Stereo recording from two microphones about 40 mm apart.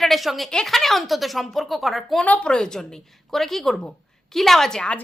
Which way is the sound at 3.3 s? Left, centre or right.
Centre.